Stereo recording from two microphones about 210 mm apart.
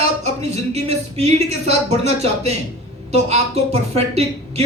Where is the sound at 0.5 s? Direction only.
30° right (ahead or behind).